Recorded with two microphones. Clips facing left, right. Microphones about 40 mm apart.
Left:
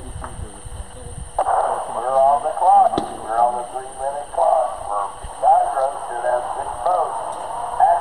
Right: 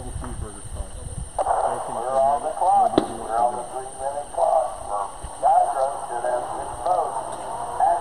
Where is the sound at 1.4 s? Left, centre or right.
Left.